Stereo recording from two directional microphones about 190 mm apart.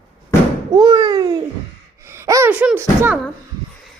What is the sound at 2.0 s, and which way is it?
Speech, 15° right (ahead or behind).